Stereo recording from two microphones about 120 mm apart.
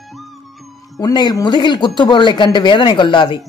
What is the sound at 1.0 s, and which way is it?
A man's voice, 35° left (ahead or behind).